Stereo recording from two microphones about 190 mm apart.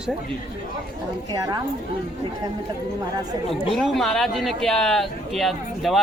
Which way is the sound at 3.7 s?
Centre (ahead or behind).